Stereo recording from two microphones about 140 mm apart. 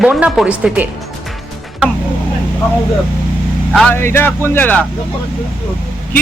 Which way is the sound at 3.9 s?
15° left (ahead or behind).